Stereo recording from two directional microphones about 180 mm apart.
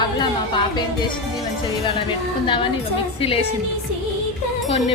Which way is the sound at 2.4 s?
25° left (ahead or behind).